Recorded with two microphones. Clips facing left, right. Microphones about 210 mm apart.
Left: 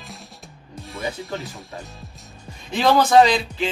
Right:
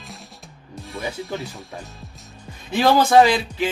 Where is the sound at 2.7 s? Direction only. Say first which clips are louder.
Right 1 dB; 5° right (ahead or behind).